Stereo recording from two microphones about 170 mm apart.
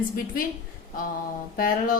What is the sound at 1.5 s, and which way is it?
Speech, 55° left (ahead or behind).